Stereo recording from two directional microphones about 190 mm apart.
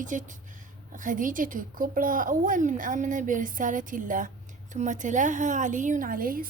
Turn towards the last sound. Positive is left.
turn(degrees=-50)  # may be behind; listen again after turning